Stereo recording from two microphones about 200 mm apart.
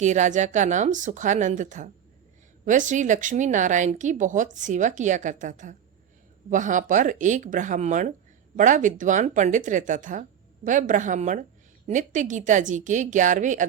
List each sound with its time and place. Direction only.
0.0 s speech: 35° right (ahead or behind)